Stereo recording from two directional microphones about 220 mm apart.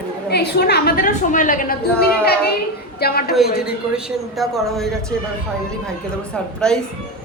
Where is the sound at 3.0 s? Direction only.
45° left (ahead or behind).